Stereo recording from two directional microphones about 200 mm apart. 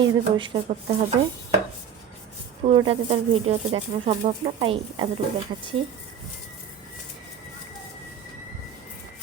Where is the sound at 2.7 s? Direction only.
25° right (ahead or behind).